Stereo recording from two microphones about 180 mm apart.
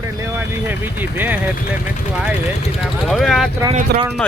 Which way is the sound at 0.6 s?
10° right (ahead or behind).